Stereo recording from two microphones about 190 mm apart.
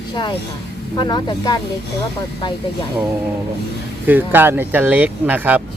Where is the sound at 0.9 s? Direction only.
25° left (ahead or behind).